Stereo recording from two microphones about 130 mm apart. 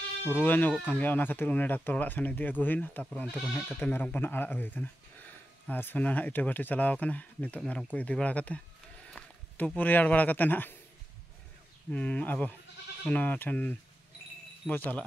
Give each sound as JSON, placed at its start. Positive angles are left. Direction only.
{"t": 0.3, "sound": "speech", "side_deg": 15}
{"t": 11.9, "sound": "speech", "side_deg": 10}